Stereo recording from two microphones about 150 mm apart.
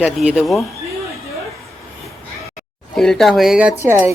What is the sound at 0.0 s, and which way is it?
Speech, 5° right (ahead or behind).